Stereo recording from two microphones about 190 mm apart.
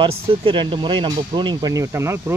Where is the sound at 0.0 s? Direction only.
25° right (ahead or behind).